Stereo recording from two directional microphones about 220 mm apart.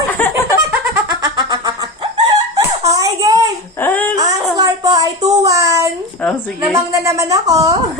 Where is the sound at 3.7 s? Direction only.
10° left (ahead or behind).